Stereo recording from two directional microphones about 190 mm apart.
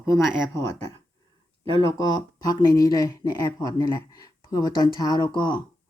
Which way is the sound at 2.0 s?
20° left (ahead or behind).